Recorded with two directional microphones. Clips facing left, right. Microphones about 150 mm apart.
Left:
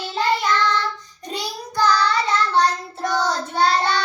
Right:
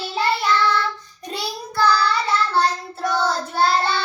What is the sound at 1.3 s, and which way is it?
Child singing, 15° left (ahead or behind).